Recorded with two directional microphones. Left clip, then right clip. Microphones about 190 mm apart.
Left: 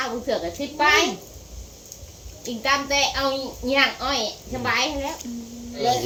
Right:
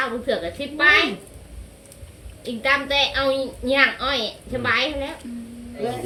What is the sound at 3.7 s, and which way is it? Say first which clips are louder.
Speech: right 2 dB; 35° right (ahead or behind).